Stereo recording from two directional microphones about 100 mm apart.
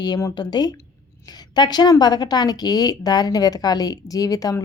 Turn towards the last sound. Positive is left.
turn(degrees=35)  # may be behind; listen again after turning